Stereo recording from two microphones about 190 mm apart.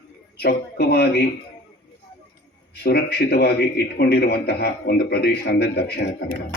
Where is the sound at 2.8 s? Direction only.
55° left (ahead or behind).